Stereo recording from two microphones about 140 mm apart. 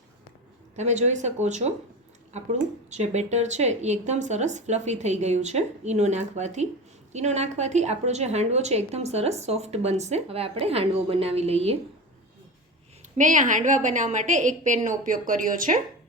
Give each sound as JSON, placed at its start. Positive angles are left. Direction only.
{"t": 0.8, "sound": "a woman's voice", "side_deg": -55}
{"t": 13.1, "sound": "speech", "side_deg": -65}
{"t": 14.8, "sound": "a woman's voice", "side_deg": -70}